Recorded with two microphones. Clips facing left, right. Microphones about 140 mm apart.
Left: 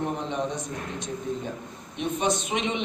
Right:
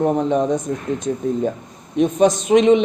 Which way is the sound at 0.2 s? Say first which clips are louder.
Right 12 dB; 45° right (ahead or behind).